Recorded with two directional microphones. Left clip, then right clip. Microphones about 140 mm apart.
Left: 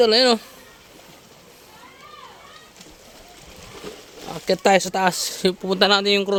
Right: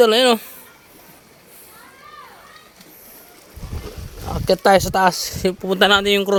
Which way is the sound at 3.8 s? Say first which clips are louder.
Even; 25° right (ahead or behind).